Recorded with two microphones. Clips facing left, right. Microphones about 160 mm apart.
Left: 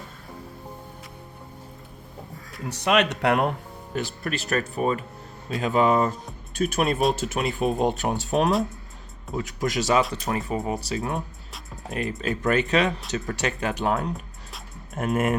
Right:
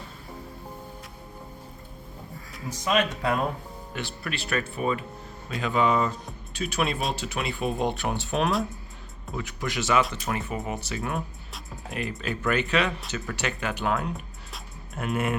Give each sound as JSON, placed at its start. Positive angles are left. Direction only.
{"t": 2.6, "sound": "speech", "side_deg": 70}
{"t": 3.9, "sound": "speech", "side_deg": 45}